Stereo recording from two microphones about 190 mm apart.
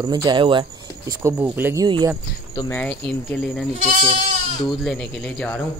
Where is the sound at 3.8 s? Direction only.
45° right (ahead or behind).